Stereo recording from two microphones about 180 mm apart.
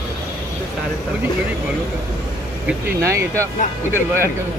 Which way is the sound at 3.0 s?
15° right (ahead or behind).